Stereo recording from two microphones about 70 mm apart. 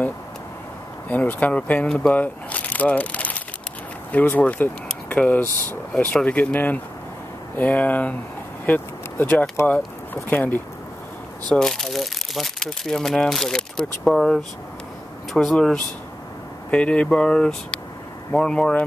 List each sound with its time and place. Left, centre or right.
1.0 s speech: left
8.6 s a sound: left
10.1 s speech: left
11.4 s speech: centre
15.4 s speech: centre
16.7 s speech: centre